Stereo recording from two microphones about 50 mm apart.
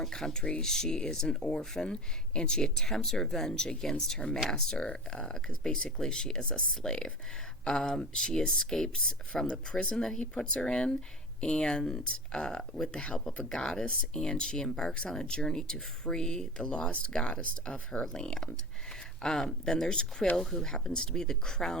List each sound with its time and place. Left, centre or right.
0.0 s speech: centre